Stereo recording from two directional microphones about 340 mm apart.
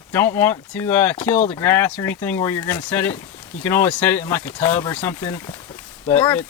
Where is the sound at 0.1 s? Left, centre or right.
Centre.